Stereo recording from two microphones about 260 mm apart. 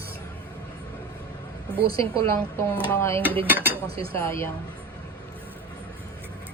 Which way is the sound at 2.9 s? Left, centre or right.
Centre.